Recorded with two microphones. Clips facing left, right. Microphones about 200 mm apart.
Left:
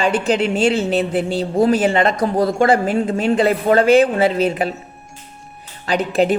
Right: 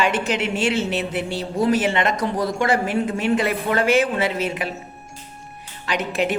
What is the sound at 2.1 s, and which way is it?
Speech, 55° left (ahead or behind).